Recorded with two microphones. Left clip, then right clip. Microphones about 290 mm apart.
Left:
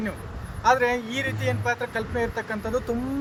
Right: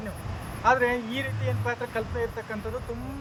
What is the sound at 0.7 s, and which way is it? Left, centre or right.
Speech, left.